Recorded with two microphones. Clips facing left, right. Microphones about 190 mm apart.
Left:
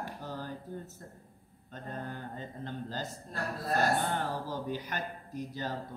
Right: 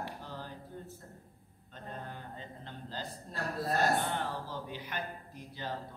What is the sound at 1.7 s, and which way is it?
A man's voice, 45° left (ahead or behind).